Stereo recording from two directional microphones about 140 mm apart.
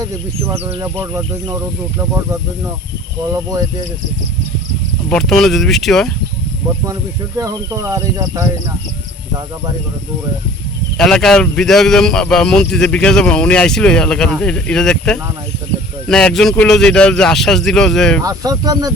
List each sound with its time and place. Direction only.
3.3 s speech: 20° right (ahead or behind)
5.0 s a man's voice: 5° left (ahead or behind)
7.3 s speech: 25° right (ahead or behind)
10.9 s a man's voice: 5° left (ahead or behind)
18.2 s speech: 25° right (ahead or behind)